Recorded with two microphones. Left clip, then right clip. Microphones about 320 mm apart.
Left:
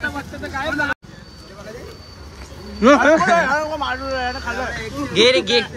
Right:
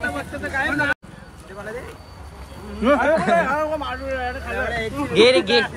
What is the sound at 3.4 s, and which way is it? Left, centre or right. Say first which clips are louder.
Speech: left 2 dB; centre.